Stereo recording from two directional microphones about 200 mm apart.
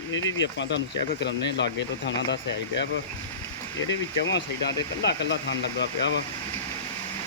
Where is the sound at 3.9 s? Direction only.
65° left (ahead or behind).